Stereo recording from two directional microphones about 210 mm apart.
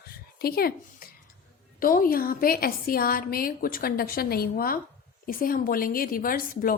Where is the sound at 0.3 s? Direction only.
45° left (ahead or behind).